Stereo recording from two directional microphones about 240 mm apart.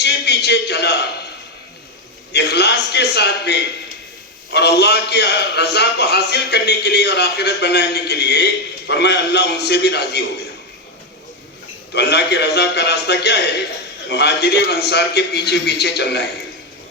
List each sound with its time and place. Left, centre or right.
0.0 s a sound: left
2.3 s a man's voice: left
11.9 s a man's voice: left